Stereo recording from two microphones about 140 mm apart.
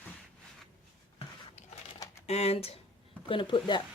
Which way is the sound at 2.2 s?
50° left (ahead or behind).